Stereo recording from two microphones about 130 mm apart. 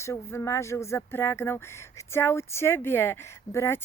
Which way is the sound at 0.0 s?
20° left (ahead or behind).